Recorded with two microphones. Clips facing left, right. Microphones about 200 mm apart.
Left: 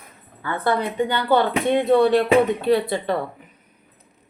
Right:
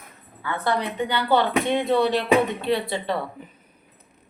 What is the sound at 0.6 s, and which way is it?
Speech, 50° left (ahead or behind).